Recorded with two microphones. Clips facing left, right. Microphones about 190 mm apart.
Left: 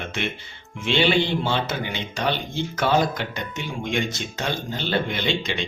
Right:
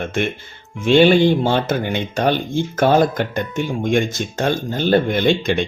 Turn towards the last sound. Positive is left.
turn(degrees=-50)  # may be behind; listen again after turning